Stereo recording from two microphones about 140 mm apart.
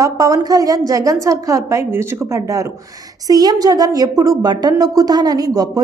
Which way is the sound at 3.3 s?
25° right (ahead or behind).